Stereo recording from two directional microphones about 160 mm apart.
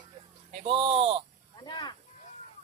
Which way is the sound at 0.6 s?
35° right (ahead or behind).